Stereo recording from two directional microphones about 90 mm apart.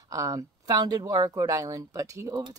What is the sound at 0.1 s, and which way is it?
Speech, 40° right (ahead or behind).